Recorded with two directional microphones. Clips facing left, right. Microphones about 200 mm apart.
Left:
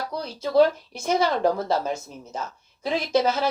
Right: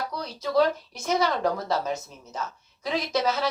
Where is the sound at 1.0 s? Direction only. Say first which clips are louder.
Left 3 dB; 30° left (ahead or behind).